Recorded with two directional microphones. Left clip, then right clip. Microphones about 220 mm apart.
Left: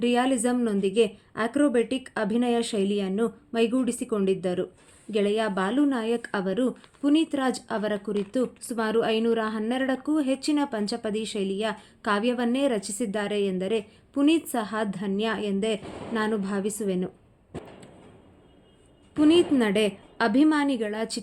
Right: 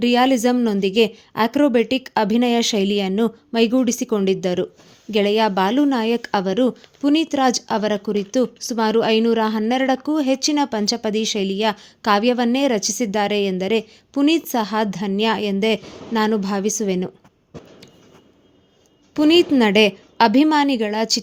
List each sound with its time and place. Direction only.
0.0 s speech: 35° right (ahead or behind)
19.1 s speech: 35° right (ahead or behind)